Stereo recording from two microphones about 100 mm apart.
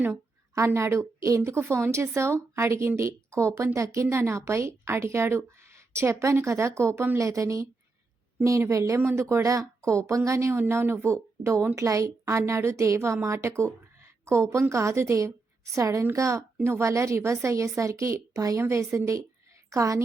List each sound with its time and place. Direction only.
0.5 s a woman's voice: 30° right (ahead or behind)
14.0 s a sound: 30° right (ahead or behind)
14.7 s a woman's voice: 30° right (ahead or behind)